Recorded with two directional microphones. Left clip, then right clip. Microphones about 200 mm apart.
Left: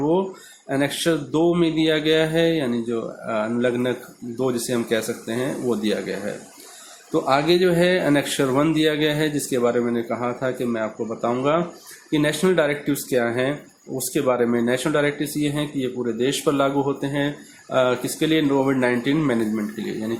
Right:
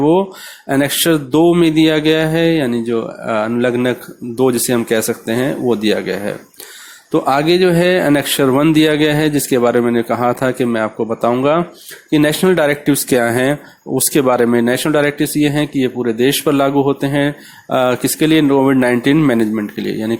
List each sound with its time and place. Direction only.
0.7 s speech: 40° right (ahead or behind)
7.3 s speech: 35° right (ahead or behind)